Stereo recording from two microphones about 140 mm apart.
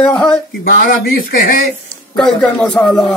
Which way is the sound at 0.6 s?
85° left.